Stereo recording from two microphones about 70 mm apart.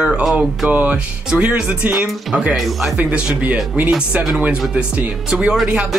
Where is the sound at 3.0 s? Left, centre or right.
Centre.